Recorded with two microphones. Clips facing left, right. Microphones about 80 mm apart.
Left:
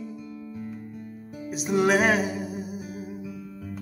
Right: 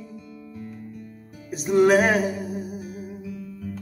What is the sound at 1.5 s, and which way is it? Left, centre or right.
Music, centre.